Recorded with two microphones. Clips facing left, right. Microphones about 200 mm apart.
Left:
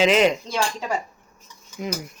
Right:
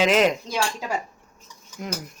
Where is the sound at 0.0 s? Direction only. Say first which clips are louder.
Left 1 dB; centre (ahead or behind).